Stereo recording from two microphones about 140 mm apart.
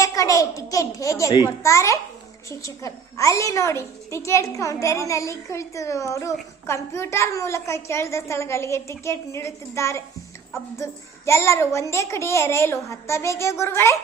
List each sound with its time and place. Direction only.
0.0 s a woman's voice: 25° left (ahead or behind)